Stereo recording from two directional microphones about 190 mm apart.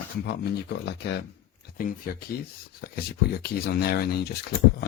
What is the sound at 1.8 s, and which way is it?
Speech, 45° left (ahead or behind).